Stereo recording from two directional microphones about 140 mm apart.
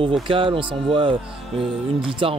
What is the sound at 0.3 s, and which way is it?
Speech, 40° right (ahead or behind).